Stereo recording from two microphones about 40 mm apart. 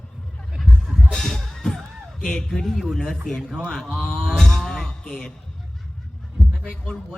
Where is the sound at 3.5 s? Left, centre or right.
Centre.